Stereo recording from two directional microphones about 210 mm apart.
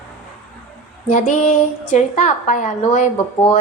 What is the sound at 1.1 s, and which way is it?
A woman's voice, 35° left (ahead or behind).